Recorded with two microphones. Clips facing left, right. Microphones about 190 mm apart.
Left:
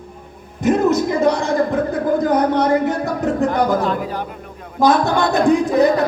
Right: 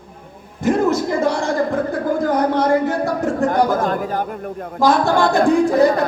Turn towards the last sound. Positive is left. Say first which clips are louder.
# even
turn(degrees=20)  # may be behind; listen again after turning